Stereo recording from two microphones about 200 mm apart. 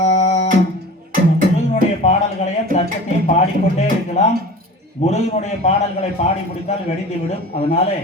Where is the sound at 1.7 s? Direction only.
35° left (ahead or behind).